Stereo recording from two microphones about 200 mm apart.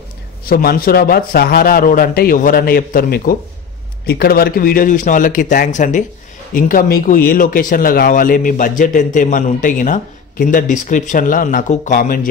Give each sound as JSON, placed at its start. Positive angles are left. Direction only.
{"t": 0.5, "sound": "speech", "side_deg": 50}